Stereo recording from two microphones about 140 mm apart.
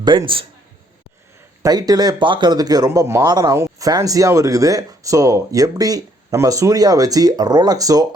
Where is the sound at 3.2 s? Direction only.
30° right (ahead or behind).